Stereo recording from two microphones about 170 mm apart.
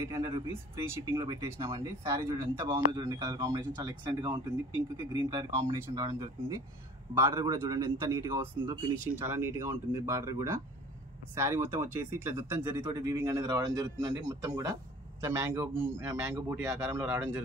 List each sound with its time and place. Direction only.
0.5 s speech: 15° right (ahead or behind)